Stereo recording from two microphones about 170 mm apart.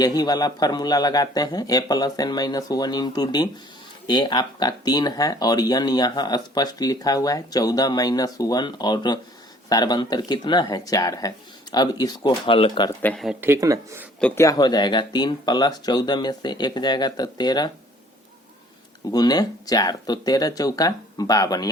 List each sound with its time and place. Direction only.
0.0 s speech: 25° left (ahead or behind)
12.3 s speech: 35° left (ahead or behind)
13.0 s speech: 10° left (ahead or behind)
13.4 s speech: 15° right (ahead or behind)
14.2 s speech: 5° left (ahead or behind)
14.4 s speech: 20° left (ahead or behind)
19.1 s speech: 25° left (ahead or behind)